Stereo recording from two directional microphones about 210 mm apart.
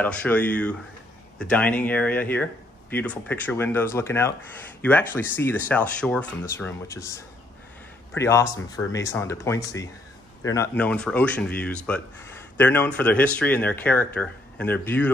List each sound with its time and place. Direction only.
0.0 s speech: 5° left (ahead or behind)